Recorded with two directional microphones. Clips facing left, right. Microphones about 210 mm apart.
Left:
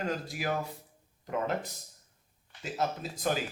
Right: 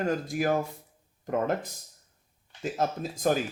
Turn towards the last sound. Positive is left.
turn(degrees=-45)  # may be behind; listen again after turning